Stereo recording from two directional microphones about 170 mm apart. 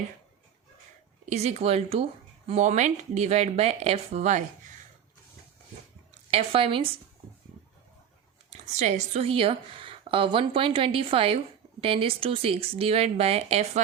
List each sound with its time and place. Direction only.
1.2 s speech: 40° right (ahead or behind)
6.3 s speech: 35° right (ahead or behind)
8.4 s speech: 40° right (ahead or behind)